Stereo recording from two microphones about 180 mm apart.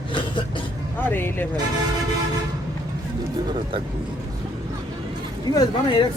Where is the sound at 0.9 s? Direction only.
10° left (ahead or behind).